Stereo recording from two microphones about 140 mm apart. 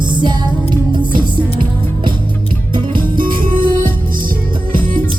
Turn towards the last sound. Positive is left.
turn(degrees=-85)